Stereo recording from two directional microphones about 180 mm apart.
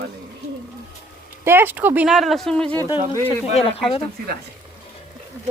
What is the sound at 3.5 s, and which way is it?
Speech, 35° left (ahead or behind).